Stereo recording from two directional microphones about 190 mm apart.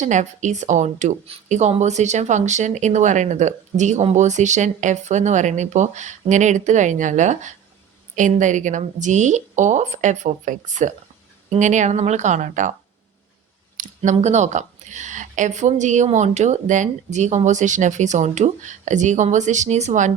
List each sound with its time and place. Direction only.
0.0 s speech: 40° right (ahead or behind)
13.7 s speech: 45° right (ahead or behind)